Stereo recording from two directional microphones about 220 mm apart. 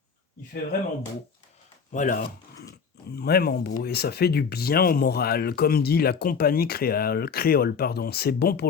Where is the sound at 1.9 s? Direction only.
40° left (ahead or behind).